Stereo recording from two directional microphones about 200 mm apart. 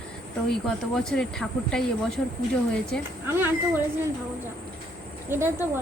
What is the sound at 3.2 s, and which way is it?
Speech, 10° right (ahead or behind).